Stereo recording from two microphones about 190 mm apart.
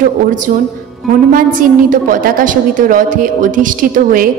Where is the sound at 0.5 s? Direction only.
45° right (ahead or behind).